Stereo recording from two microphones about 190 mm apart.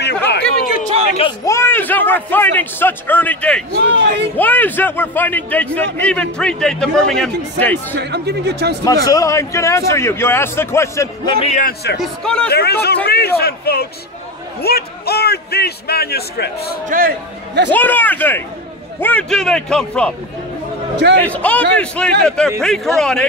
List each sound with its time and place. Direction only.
0.0 s chatter: 60° left (ahead or behind)
1.4 s a man's voice: 15° left (ahead or behind)
3.7 s speech: 65° right (ahead or behind)
4.4 s a man's voice: 10° left (ahead or behind)
8.0 s speech: 60° right (ahead or behind)
8.8 s a man's voice: 20° left (ahead or behind)
11.4 s a man's voice: 40° left (ahead or behind)
12.0 s a man's voice: 5° left (ahead or behind)
12.4 s a man's voice: 60° left (ahead or behind)
16.8 s speech: 45° right (ahead or behind)
17.7 s a man's voice: 10° left (ahead or behind)
20.9 s a man's voice: 65° right (ahead or behind)
21.2 s a man's voice: 5° left (ahead or behind)